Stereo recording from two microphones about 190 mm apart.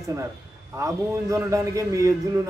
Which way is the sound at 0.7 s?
15° right (ahead or behind).